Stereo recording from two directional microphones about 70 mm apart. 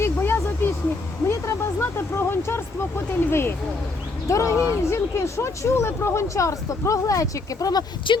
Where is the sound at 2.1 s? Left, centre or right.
Left.